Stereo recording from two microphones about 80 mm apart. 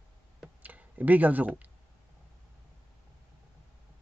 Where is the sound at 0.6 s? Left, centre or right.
Right.